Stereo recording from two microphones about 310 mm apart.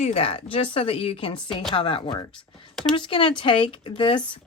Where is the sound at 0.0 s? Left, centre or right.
Centre.